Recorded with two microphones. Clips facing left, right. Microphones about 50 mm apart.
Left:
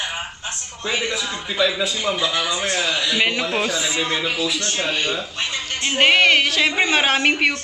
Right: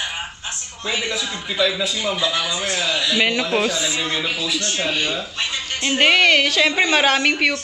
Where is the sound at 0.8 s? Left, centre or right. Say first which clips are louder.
Left 1 dB; left.